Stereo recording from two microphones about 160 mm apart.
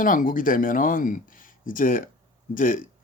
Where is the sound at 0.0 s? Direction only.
60° left (ahead or behind).